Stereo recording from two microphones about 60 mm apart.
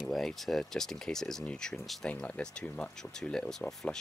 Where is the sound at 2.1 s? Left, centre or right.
Centre.